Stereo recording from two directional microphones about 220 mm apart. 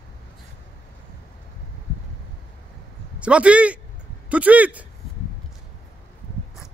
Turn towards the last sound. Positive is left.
turn(degrees=-5)  # may be behind; listen again after turning